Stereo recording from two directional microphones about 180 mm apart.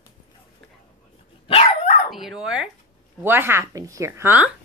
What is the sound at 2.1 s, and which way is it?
A woman's voice, centre (ahead or behind).